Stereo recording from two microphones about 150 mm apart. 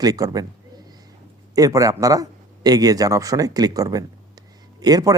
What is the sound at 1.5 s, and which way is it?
Speech, 25° right (ahead or behind).